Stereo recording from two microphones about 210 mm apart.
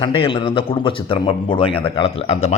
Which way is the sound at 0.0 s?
25° left (ahead or behind).